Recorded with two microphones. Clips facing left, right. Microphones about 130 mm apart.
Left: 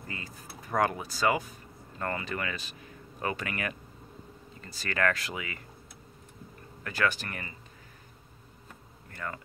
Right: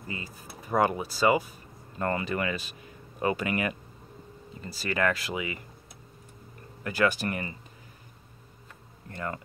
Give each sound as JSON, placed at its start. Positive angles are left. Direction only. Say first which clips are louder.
{"t": 0.4, "sound": "speech", "louder": "right 3 dB", "side_deg": -5}
{"t": 2.0, "sound": "speech", "louder": "right 5 dB", "side_deg": -25}
{"t": 2.3, "sound": "speech", "louder": "right 5 dB", "side_deg": -15}
{"t": 6.8, "sound": "speech", "louder": "right 4 dB", "side_deg": -10}
{"t": 9.1, "sound": "speech", "louder": "right 4 dB", "side_deg": -25}